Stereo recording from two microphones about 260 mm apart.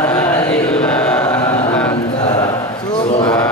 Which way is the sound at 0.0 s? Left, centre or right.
Centre.